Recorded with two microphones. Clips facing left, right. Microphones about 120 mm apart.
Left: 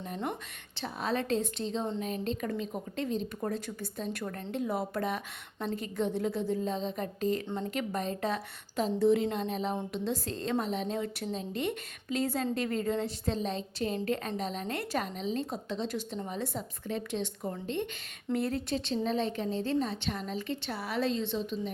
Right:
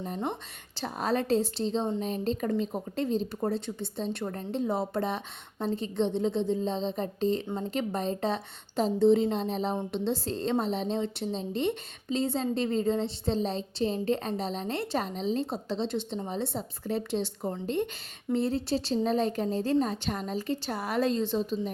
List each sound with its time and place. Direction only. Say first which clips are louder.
0.0 s a woman's voice: right 3 dB; 35° right (ahead or behind)